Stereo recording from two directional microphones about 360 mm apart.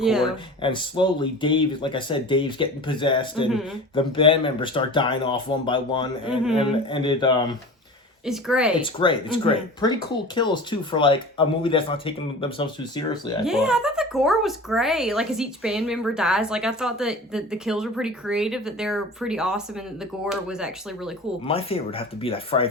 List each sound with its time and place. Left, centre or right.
0.0 s speech: centre
0.6 s speech: centre
8.2 s speech: centre
8.8 s speech: centre
13.4 s speech: centre
21.4 s speech: centre